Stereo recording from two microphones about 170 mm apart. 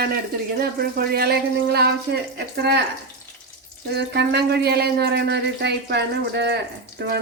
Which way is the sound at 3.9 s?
75° right (ahead or behind).